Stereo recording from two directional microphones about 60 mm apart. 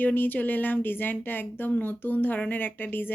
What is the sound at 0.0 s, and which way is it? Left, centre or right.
A woman's voice, left.